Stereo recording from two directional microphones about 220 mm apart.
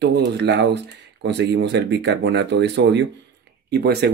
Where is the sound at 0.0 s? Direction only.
50° right (ahead or behind).